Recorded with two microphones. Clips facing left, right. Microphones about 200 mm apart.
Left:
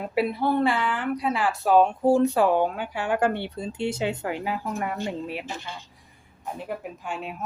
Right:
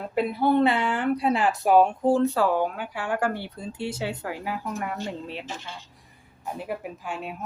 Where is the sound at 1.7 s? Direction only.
5° right (ahead or behind).